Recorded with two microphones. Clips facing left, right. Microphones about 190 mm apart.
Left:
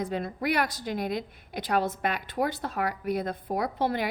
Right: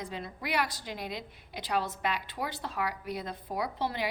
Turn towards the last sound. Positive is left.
turn(degrees=50)  # may be behind; listen again after turning